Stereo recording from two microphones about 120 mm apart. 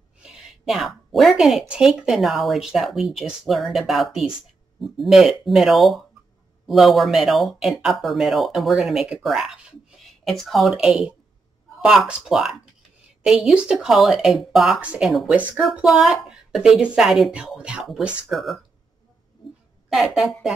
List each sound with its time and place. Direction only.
0.2 s speech: 5° right (ahead or behind)
19.9 s speech: centre (ahead or behind)